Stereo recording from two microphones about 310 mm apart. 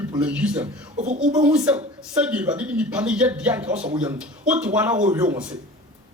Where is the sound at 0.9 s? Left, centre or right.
Right.